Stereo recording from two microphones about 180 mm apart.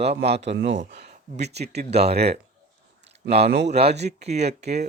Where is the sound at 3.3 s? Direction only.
35° right (ahead or behind).